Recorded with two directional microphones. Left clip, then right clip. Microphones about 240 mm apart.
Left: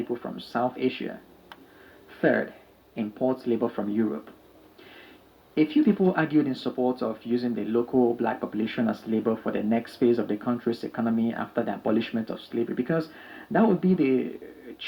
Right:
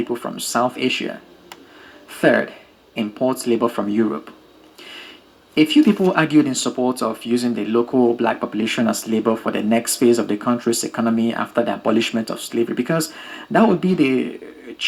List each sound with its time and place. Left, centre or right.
0.1 s speech: right
5.5 s speech: right